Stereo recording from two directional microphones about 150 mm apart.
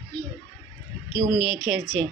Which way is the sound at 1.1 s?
5° right (ahead or behind).